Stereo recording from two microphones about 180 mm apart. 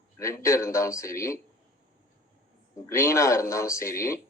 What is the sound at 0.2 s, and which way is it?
A man's voice, 15° left (ahead or behind).